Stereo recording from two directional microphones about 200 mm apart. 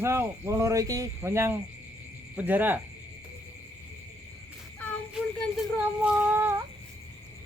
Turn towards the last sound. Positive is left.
turn(degrees=-10)  # may be behind; listen again after turning